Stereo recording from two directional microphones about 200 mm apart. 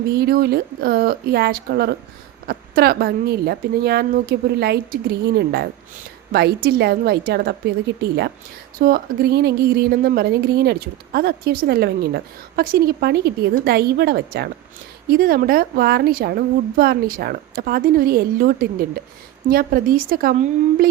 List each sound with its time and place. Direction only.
0.1 s a woman's voice: 50° right (ahead or behind)
8.8 s a woman's voice: 50° right (ahead or behind)